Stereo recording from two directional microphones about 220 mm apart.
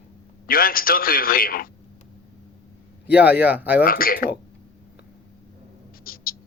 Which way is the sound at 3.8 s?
40° left (ahead or behind).